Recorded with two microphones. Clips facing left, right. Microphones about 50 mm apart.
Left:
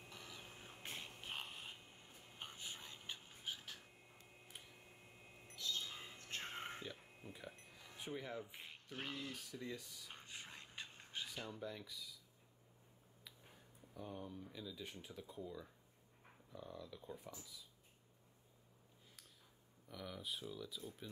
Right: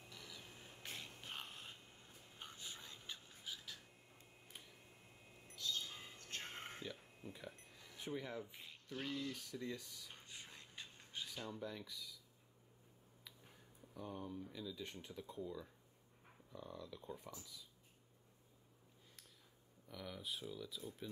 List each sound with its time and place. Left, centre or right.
0.1 s a sound: left; by 1.8 s centre
2.3 s a sound: left
5.6 s a sound: left; by 7.9 s centre
8.0 s speech: centre
8.9 s speech: left
9.5 s speech: centre
10.1 s whispering: left
11.4 s speech: centre
13.9 s speech: centre
19.9 s speech: centre